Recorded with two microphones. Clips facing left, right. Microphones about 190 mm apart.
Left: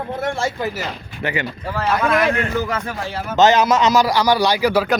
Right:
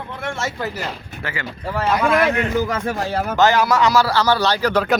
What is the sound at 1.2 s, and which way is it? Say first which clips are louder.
Speech: left 6 dB; 20° left (ahead or behind).